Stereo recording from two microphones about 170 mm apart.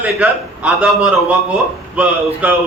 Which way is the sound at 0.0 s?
10° right (ahead or behind).